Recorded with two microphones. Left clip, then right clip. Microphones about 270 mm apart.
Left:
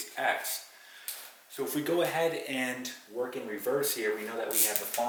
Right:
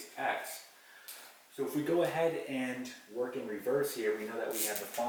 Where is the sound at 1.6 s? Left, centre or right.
Centre.